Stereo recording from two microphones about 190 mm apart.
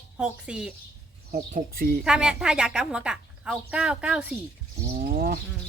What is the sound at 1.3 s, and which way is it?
Speech, 50° right (ahead or behind).